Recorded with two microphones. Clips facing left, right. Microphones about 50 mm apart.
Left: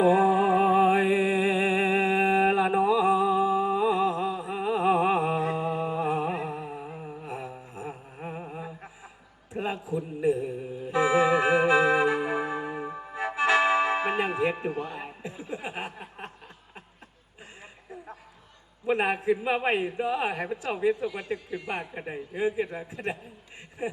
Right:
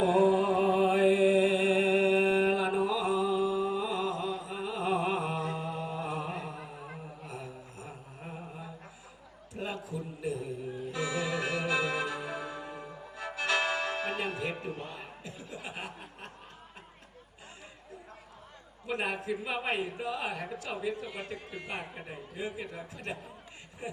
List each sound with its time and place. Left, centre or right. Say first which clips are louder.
0.0 s music: left 4 dB; left
7.3 s mantra: left 5 dB; left
9.5 s a sound: left 7 dB; left
10.9 s music: left 12 dB; left
14.5 s chuckle: left 7 dB; left
18.9 s a woman's voice: left 8 dB; left
23.8 s a sound: left 8 dB; left